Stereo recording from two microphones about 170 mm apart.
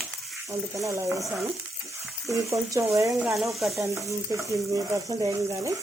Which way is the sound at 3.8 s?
15° right (ahead or behind).